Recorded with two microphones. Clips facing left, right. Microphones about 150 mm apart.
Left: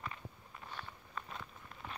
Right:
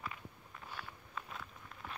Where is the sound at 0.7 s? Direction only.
5° right (ahead or behind).